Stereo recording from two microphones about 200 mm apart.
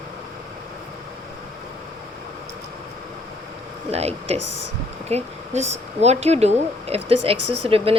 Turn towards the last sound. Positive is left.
turn(degrees=-30)  # may be behind; listen again after turning